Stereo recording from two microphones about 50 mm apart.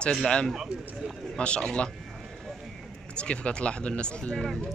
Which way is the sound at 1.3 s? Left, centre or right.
Centre.